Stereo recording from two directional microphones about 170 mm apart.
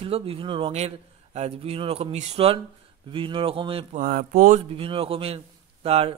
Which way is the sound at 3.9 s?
60° right (ahead or behind).